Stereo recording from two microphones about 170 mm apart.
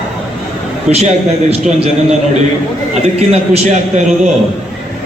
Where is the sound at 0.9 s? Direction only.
40° right (ahead or behind).